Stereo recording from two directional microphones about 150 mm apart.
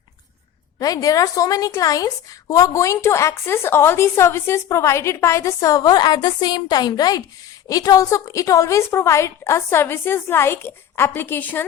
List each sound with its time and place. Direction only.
0.8 s a woman's voice: 25° left (ahead or behind)